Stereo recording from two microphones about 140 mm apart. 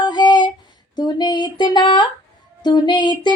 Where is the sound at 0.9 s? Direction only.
30° left (ahead or behind).